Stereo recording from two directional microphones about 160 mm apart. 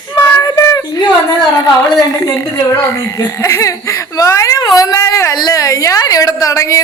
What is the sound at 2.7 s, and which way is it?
Speech, 20° left (ahead or behind).